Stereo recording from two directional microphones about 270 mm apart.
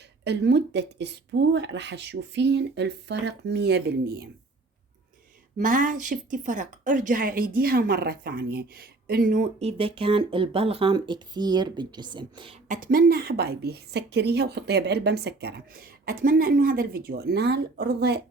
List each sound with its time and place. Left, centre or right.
0.3 s a woman's voice: right
5.5 s a woman's voice: right